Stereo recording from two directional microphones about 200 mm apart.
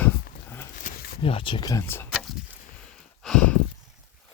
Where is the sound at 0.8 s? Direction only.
45° left (ahead or behind).